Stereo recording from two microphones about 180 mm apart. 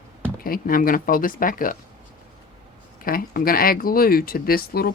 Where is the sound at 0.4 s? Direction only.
55° left (ahead or behind).